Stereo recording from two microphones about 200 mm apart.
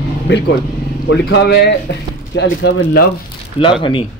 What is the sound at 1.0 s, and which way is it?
Speech, 60° left (ahead or behind).